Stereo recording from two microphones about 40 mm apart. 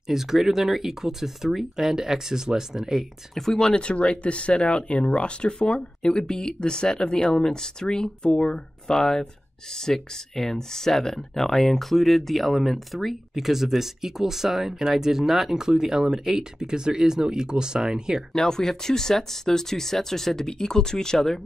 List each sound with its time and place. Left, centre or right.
0.1 s speech: centre
3.3 s speech: centre
18.3 s speech: centre